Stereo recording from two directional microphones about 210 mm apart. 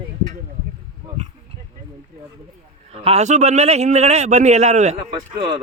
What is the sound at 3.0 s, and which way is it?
A man's voice, 30° right (ahead or behind).